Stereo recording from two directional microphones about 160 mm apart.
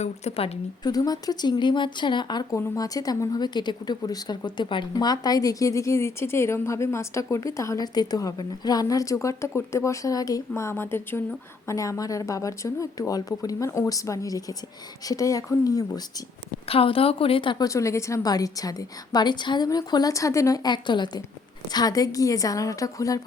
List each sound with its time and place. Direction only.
0.0 s speech: 40° left (ahead or behind)
0.9 s speech: 25° left (ahead or behind)
16.6 s speech: 35° left (ahead or behind)